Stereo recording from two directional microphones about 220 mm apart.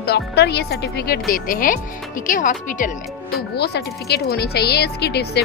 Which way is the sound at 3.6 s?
45° left (ahead or behind).